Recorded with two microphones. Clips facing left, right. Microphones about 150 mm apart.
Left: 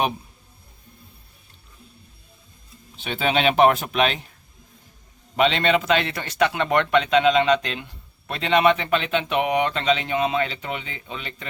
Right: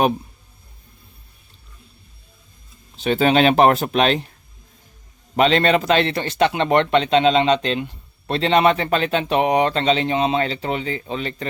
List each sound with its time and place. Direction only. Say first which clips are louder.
3.0 s speech: right 6 dB; 40° right (ahead or behind)
5.4 s speech: right 3 dB; 40° right (ahead or behind)